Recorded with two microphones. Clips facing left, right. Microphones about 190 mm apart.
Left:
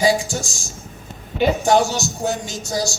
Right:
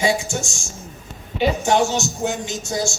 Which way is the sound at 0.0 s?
35° left (ahead or behind).